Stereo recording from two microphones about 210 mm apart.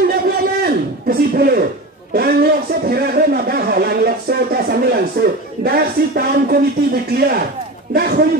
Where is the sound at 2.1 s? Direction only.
45° right (ahead or behind).